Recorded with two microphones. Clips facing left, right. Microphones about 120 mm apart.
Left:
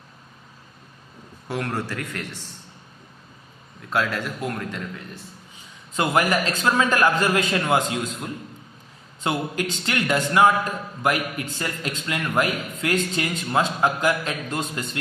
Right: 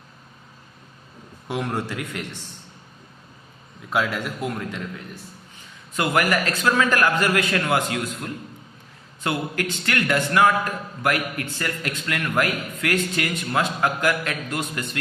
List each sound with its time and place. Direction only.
1.5 s a man's voice: 10° right (ahead or behind)
3.8 s a man's voice: 5° right (ahead or behind)
5.9 s a man's voice: 25° left (ahead or behind)